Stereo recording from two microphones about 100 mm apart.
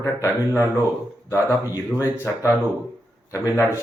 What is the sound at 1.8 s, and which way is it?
Speech, 20° left (ahead or behind).